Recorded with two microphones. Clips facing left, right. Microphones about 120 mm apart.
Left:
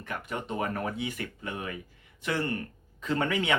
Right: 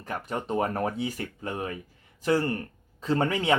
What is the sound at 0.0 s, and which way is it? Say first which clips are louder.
Speech: right 3 dB; 35° right (ahead or behind).